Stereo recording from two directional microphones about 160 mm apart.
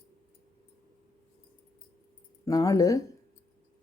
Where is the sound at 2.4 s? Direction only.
20° left (ahead or behind).